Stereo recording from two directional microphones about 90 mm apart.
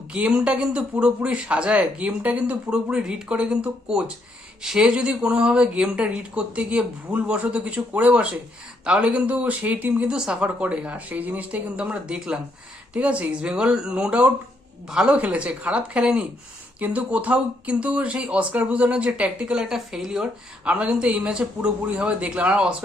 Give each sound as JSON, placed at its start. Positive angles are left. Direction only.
{"t": 0.1, "sound": "speech", "side_deg": -10}